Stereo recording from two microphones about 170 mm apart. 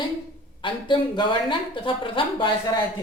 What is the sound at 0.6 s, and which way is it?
Speech, 30° left (ahead or behind).